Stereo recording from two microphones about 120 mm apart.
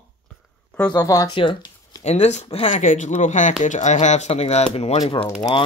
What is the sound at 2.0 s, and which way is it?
Speech, 70° left (ahead or behind).